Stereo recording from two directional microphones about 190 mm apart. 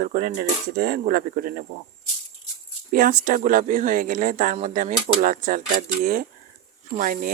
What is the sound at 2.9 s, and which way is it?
Speech, 45° right (ahead or behind).